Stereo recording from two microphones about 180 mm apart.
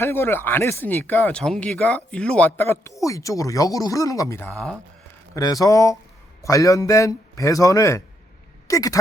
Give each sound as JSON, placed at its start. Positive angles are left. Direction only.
{"t": 0.0, "sound": "speech", "side_deg": 10}
{"t": 5.3, "sound": "speech", "side_deg": 20}